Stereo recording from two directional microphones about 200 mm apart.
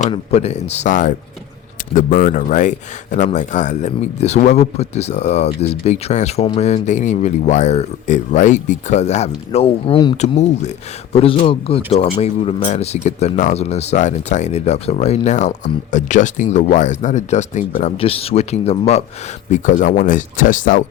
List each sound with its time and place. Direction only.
0.0 s speech: 30° left (ahead or behind)
10.3 s speech: 35° left (ahead or behind)